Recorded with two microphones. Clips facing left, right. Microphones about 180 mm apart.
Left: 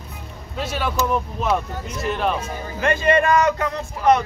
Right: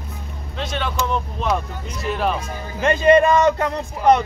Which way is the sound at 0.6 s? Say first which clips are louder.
Left 1 dB; 5° left (ahead or behind).